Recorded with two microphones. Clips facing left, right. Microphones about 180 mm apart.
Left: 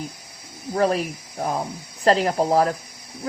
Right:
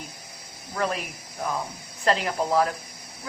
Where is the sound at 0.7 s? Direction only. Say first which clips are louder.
Left 7 dB; 35° left (ahead or behind).